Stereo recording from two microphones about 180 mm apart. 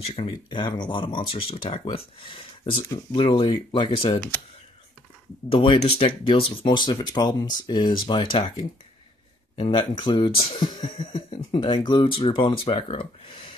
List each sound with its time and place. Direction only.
0.0 s speech: 35° left (ahead or behind)
5.5 s speech: 30° left (ahead or behind)